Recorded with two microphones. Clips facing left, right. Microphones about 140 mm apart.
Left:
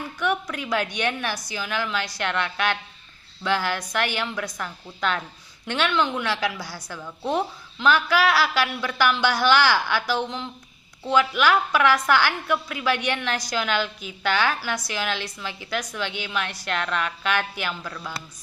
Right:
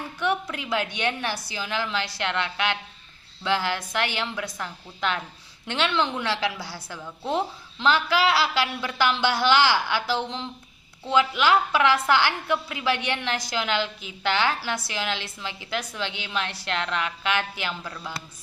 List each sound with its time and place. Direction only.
0.2 s a sound: 25° right (ahead or behind)
0.9 s a woman's voice: 20° right (ahead or behind)
6.8 s a woman's voice: 15° right (ahead or behind)